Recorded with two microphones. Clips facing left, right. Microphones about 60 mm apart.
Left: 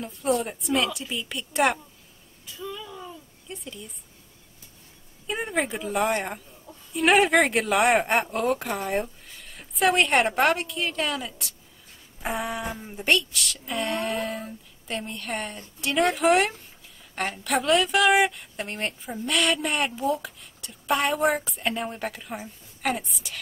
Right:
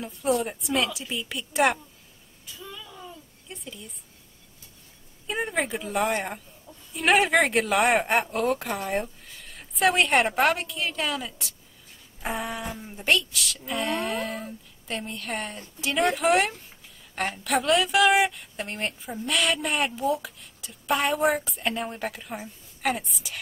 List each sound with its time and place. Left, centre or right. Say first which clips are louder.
0.0 s a woman's voice: even; centre
2.8 s a sound: left 3 dB; centre
5.2 s a woman's voice: even; centre